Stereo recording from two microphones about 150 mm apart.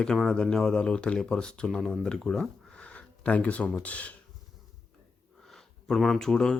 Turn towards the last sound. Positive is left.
turn(degrees=5)  # may be behind; listen again after turning